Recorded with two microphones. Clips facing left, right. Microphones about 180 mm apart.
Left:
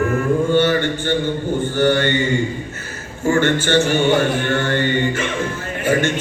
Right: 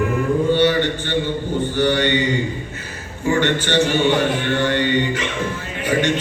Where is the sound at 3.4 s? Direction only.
45° left (ahead or behind).